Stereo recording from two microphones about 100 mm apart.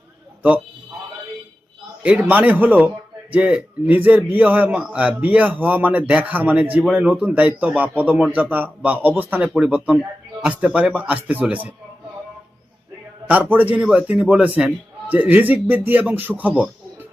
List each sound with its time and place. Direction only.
2.0 s a man's voice: 15° right (ahead or behind)
9.5 s a man's voice: 10° right (ahead or behind)
13.2 s a man's voice: 15° right (ahead or behind)